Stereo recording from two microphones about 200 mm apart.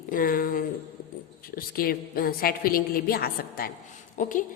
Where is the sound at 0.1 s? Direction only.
45° left (ahead or behind).